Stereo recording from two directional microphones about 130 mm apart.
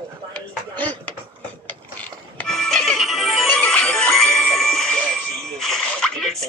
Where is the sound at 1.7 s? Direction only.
10° left (ahead or behind).